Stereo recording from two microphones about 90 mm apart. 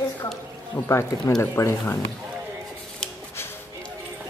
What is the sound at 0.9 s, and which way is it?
A woman's voice, 30° left (ahead or behind).